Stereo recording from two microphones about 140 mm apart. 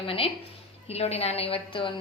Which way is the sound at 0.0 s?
40° left (ahead or behind).